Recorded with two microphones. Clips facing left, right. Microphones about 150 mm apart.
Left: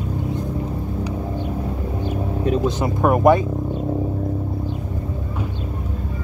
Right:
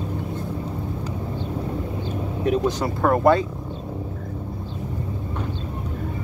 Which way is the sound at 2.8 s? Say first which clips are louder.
Left 2 dB; 15° left (ahead or behind).